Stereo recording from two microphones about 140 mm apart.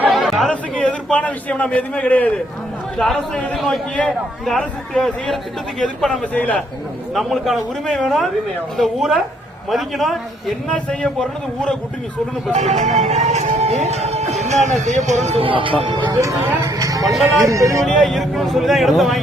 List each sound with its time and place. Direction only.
0.1 s chatter: centre (ahead or behind)
0.5 s a man's voice: 10° left (ahead or behind)
7.1 s a man's voice: centre (ahead or behind)
12.5 s music: 55° right (ahead or behind); by 16.1 s 35° right (ahead or behind)
16.2 s speech: 20° right (ahead or behind)
17.8 s a man's voice: centre (ahead or behind)